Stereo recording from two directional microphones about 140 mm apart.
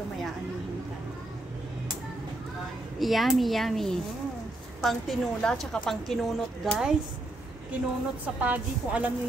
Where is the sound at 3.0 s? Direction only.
Centre (ahead or behind).